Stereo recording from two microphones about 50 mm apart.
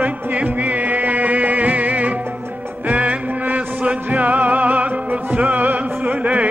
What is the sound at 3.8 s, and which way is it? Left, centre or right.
Music, right.